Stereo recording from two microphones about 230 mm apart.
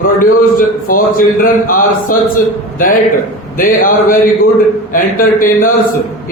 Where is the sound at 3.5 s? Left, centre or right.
Left.